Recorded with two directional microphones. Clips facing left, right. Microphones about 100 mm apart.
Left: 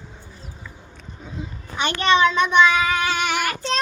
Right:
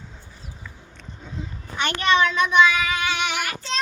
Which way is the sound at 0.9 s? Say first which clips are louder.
Left 1 dB; 10° left (ahead or behind).